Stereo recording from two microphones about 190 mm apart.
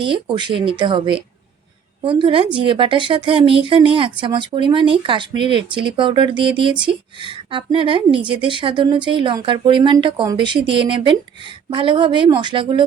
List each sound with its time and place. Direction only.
0.0 s speech: 25° right (ahead or behind)